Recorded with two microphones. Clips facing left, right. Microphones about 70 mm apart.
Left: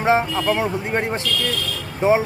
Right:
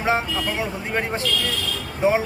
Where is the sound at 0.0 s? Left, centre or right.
Left.